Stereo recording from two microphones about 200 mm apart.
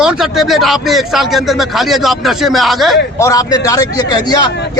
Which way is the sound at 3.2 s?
20° left (ahead or behind).